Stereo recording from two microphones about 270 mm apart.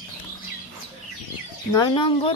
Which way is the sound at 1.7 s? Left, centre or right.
Centre.